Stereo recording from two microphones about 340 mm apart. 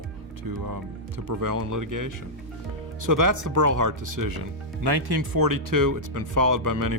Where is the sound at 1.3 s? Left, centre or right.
Right.